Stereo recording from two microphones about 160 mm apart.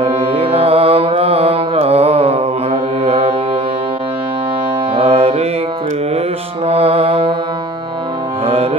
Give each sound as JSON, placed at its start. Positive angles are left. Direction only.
{"t": 0.0, "sound": "music", "side_deg": -35}
{"t": 4.9, "sound": "music", "side_deg": -40}
{"t": 6.7, "sound": "music", "side_deg": -40}